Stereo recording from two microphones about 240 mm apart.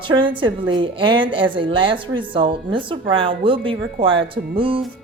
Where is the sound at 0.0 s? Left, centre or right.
Centre.